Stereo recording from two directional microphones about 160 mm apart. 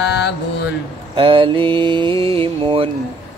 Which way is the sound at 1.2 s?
35° right (ahead or behind).